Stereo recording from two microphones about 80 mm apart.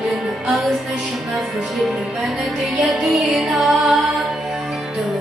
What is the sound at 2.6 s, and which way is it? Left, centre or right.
Music, centre.